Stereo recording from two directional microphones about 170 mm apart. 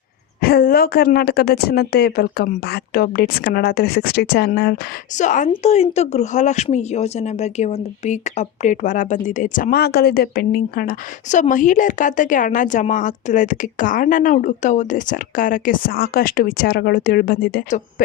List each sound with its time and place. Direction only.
0.4 s a woman's voice: 65° left (ahead or behind)
5.1 s speech: 45° left (ahead or behind); by 17.6 s 65° left (ahead or behind)